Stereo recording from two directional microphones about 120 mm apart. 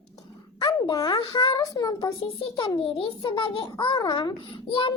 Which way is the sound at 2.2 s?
50° left (ahead or behind).